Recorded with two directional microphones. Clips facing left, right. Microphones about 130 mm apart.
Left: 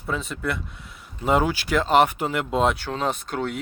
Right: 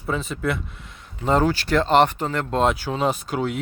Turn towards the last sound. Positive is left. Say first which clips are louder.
# right 3 dB
turn(degrees=-5)  # may be behind; listen again after turning